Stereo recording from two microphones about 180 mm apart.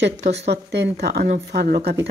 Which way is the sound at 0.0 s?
75° right (ahead or behind).